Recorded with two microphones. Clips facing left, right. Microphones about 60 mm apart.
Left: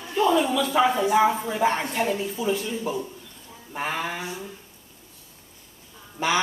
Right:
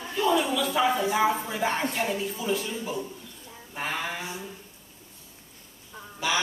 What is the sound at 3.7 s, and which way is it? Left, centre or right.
Speech, centre.